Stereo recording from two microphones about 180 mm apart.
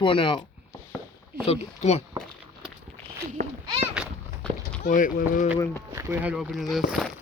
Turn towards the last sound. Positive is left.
turn(degrees=0)  # may be behind; listen again after turning